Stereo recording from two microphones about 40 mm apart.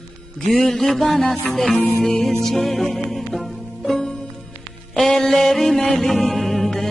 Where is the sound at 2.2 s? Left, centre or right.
Centre.